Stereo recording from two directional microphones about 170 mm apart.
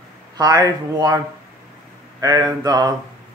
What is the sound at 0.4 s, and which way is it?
Speech, 20° right (ahead or behind).